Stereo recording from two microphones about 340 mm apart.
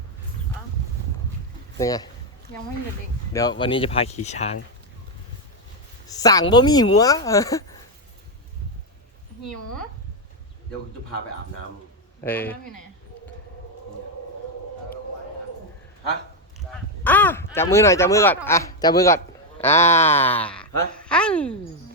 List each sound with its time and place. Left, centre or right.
1.8 s speech: centre
3.6 s speech: centre
6.1 s speech: centre
12.2 s speech: centre
17.0 s speech: centre